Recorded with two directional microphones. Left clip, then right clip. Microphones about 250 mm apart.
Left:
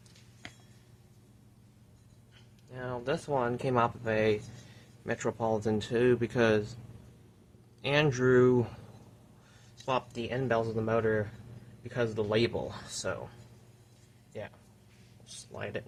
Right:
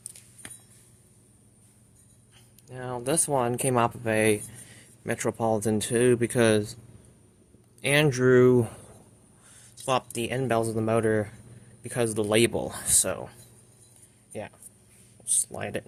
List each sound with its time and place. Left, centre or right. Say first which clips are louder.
2.6 s speech: right 4 dB; right
7.8 s speech: right 5 dB; right
9.8 s speech: right 5 dB; right
15.3 s a sound: right 8 dB; right